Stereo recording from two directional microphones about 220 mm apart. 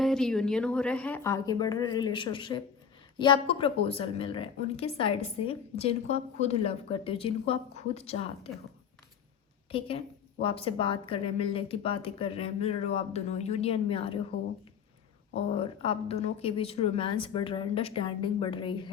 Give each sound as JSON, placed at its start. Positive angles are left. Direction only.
{"t": 0.0, "sound": "a woman's voice", "side_deg": 0}
{"t": 9.7, "sound": "a woman's voice", "side_deg": 25}
{"t": 15.4, "sound": "a woman's voice", "side_deg": 25}